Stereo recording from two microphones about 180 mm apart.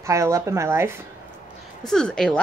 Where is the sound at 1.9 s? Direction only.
5° left (ahead or behind).